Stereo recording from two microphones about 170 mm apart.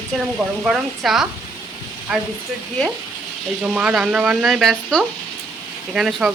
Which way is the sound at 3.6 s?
5° right (ahead or behind).